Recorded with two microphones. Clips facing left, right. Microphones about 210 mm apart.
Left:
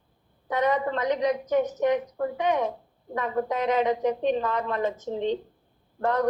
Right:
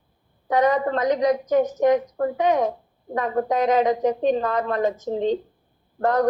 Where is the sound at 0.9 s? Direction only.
40° right (ahead or behind).